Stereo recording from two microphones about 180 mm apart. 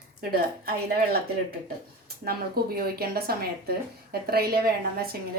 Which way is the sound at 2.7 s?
60° right (ahead or behind).